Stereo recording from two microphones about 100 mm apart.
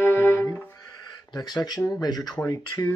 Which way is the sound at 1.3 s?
45° left (ahead or behind).